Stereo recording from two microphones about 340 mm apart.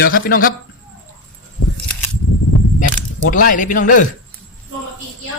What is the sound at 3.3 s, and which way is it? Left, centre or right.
Speech, left.